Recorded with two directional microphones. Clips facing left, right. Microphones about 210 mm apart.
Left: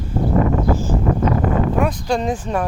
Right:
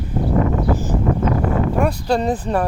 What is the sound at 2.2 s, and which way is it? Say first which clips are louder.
Speech: right 2 dB; 35° right (ahead or behind).